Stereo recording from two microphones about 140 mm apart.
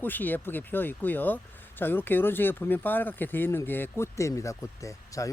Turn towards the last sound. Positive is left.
turn(degrees=20)  # may be behind; listen again after turning